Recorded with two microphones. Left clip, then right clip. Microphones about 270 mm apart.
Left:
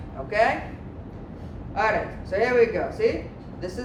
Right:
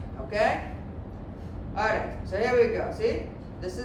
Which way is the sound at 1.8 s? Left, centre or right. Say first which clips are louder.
Left 3 dB; left.